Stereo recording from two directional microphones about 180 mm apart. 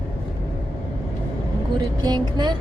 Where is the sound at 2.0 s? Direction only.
25° right (ahead or behind).